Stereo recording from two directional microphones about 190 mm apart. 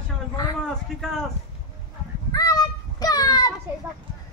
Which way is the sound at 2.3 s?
20° left (ahead or behind).